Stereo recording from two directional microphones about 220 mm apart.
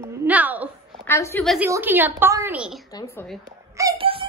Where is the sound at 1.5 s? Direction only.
10° right (ahead or behind).